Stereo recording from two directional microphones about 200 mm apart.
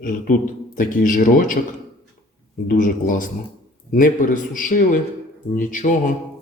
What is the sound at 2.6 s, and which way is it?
Speech, 40° left (ahead or behind).